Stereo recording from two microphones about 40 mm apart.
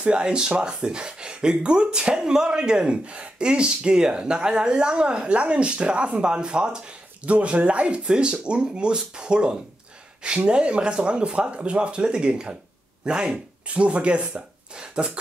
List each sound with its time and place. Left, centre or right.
0.0 s speech: right
7.2 s speech: right
14.8 s a sound: right